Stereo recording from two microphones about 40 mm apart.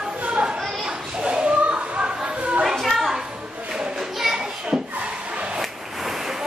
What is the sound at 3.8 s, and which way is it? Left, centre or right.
Children playing, centre.